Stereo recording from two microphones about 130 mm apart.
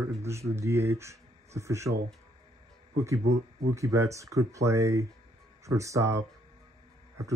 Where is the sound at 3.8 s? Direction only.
25° right (ahead or behind).